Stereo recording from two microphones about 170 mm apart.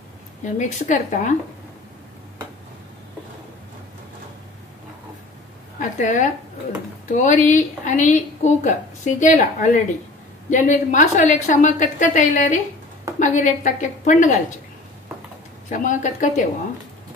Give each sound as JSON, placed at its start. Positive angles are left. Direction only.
{"t": 0.6, "sound": "a woman's voice", "side_deg": 45}
{"t": 5.8, "sound": "a woman's voice", "side_deg": 45}
{"t": 15.7, "sound": "a woman's voice", "side_deg": 50}